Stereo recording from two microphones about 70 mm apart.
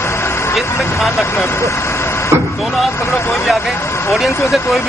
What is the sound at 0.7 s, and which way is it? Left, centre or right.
Speech, left.